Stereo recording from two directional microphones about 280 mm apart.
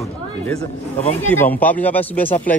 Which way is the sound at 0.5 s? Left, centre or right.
Centre.